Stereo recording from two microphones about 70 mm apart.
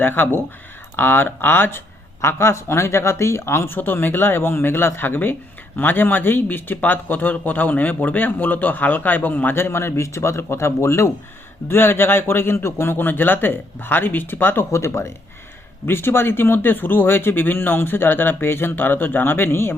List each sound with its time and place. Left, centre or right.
0.0 s speech: left